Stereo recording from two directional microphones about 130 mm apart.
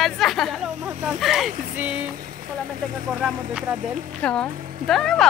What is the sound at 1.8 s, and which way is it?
Vehicle, 10° right (ahead or behind).